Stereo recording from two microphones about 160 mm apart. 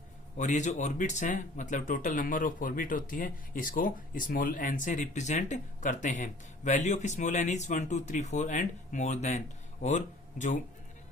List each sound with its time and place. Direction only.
0.3 s speech: 50° left (ahead or behind)